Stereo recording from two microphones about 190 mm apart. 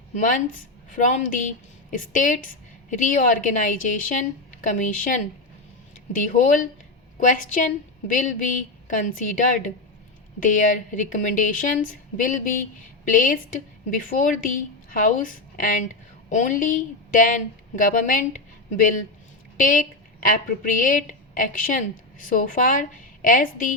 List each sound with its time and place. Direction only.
0.1 s a woman's voice: 45° left (ahead or behind)
19.5 s speech: 45° left (ahead or behind)